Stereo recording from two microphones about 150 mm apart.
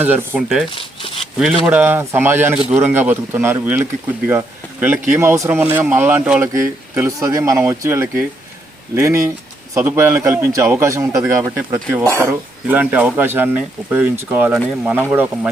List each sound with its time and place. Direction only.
0.0 s speech: 10° right (ahead or behind)
0.7 s a sound: 35° left (ahead or behind)
1.6 s speech: 15° right (ahead or behind)